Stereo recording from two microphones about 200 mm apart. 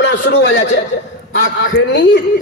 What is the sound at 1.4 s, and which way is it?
Speech, 40° left (ahead or behind).